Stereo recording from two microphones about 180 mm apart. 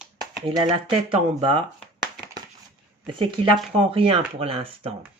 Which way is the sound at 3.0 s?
25° right (ahead or behind).